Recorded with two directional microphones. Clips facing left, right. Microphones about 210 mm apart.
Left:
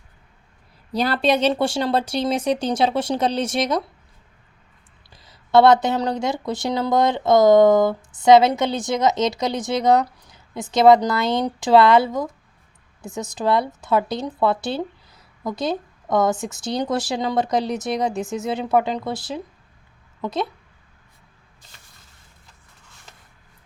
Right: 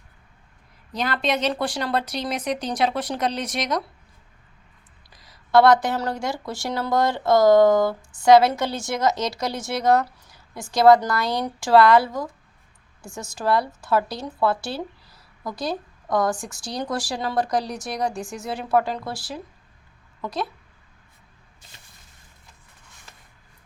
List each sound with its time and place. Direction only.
0.9 s speech: 35° left (ahead or behind)
5.1 s speech: 25° left (ahead or behind)